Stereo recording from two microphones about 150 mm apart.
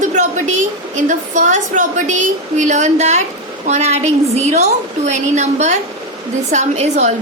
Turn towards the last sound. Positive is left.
turn(degrees=-45)  # may be behind; listen again after turning